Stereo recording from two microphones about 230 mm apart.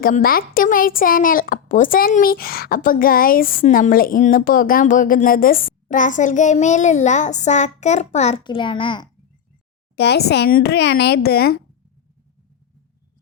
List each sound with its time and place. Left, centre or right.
0.0 s speech: left
9.9 s speech: left